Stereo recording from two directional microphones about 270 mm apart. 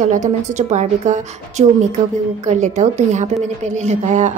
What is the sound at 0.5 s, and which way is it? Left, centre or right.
A woman's voice, right.